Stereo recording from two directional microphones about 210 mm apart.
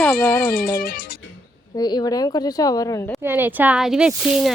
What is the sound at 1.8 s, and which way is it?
Speech, 20° left (ahead or behind).